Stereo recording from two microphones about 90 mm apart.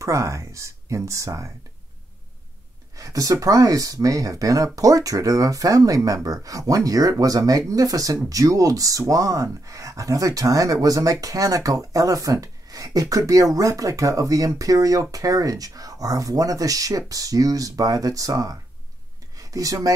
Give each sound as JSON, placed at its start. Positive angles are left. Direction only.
{"t": 0.0, "sound": "speech", "side_deg": -35}
{"t": 3.0, "sound": "speech", "side_deg": -40}
{"t": 19.3, "sound": "a sound", "side_deg": -40}